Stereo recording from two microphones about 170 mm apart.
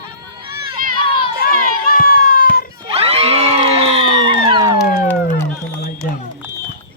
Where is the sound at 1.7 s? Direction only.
55° left (ahead or behind).